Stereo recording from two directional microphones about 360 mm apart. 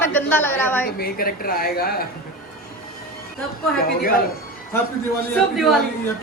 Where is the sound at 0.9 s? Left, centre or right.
Left.